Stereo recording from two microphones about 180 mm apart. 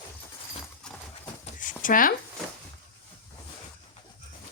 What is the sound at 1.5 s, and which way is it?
Zipper, 45° left (ahead or behind).